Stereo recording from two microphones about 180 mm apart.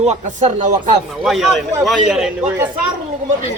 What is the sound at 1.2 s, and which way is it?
A man's voice, centre (ahead or behind).